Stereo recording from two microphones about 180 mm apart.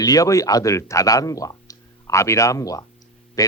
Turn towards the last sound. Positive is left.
turn(degrees=20)  # may be behind; listen again after turning